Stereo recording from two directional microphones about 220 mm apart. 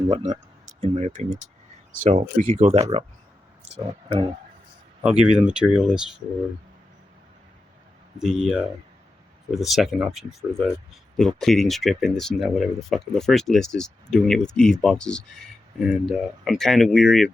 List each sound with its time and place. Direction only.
0.1 s speech: 20° right (ahead or behind)
0.8 s speech: 30° right (ahead or behind)
5.0 s speech: 5° right (ahead or behind)
8.2 s speech: 5° right (ahead or behind)